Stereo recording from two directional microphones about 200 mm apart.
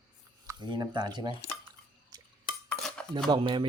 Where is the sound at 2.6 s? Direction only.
5° left (ahead or behind).